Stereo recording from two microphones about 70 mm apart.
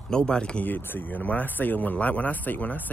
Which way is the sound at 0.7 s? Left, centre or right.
Left.